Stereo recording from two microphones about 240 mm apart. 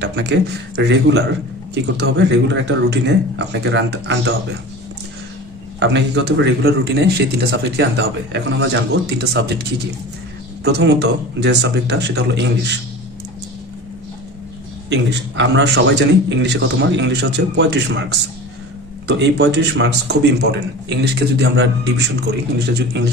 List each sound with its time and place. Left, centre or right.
0.0 s speech: right
5.8 s speech: right
10.6 s speech: right
14.9 s speech: right